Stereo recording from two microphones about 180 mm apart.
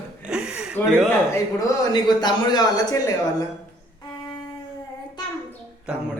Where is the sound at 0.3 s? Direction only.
5° right (ahead or behind).